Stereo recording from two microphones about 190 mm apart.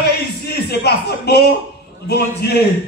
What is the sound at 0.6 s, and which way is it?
A man's voice, 60° left (ahead or behind).